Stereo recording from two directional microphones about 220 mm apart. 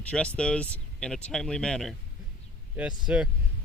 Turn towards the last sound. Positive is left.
turn(degrees=-5)  # may be behind; listen again after turning